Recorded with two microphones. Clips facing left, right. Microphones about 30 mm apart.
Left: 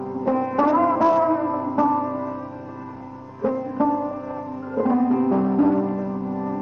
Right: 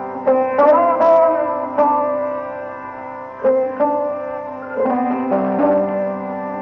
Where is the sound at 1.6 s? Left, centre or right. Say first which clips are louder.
Right 5 dB; right.